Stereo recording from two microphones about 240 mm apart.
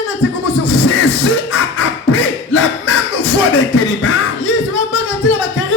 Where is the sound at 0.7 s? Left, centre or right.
Left.